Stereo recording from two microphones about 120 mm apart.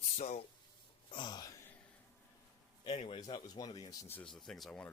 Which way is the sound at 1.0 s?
40° left (ahead or behind).